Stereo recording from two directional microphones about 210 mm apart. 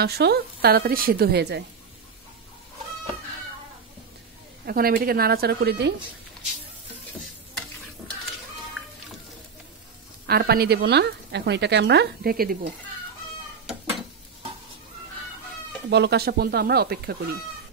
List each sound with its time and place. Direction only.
0.0 s speech: 50° right (ahead or behind)
4.6 s speech: 45° right (ahead or behind)
10.2 s speech: 50° right (ahead or behind)
15.9 s speech: 50° right (ahead or behind)